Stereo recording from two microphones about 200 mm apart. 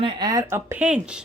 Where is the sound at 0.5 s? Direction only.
10° right (ahead or behind).